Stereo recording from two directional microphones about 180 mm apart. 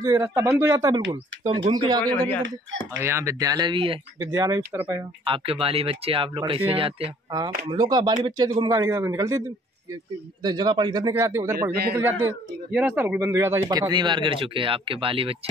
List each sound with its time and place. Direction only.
0.0 s speech: 15° right (ahead or behind)
2.1 s speech: 10° left (ahead or behind)
3.0 s speech: 15° right (ahead or behind)
4.2 s speech: 15° right (ahead or behind)
5.2 s speech: 30° right (ahead or behind)
10.4 s speech: 25° right (ahead or behind)
11.7 s a man's voice: 60° right (ahead or behind)
12.7 s speech: 10° right (ahead or behind); by 15.3 s 30° right (ahead or behind)